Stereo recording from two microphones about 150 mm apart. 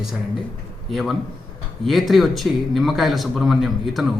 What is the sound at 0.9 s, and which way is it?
A man's voice, centre (ahead or behind).